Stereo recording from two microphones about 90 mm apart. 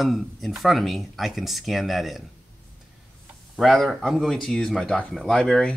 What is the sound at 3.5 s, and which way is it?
Speech, centre (ahead or behind).